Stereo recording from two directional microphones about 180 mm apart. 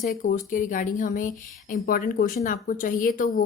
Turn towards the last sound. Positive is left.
turn(degrees=50)  # may be behind; listen again after turning